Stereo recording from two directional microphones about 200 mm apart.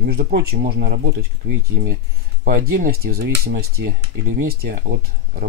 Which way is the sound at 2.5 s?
45° right (ahead or behind).